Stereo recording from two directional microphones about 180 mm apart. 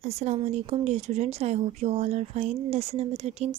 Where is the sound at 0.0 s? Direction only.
35° right (ahead or behind).